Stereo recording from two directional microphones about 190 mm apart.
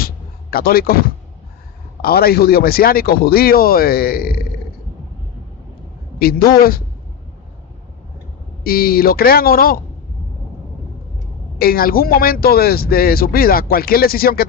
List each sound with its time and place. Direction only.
0.5 s speech: 50° left (ahead or behind)
6.1 s speech: 50° left (ahead or behind)
8.6 s speech: 50° left (ahead or behind)
11.5 s speech: 50° left (ahead or behind)